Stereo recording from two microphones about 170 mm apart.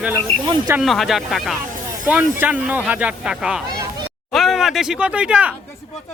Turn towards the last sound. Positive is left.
turn(degrees=-5)  # may be behind; listen again after turning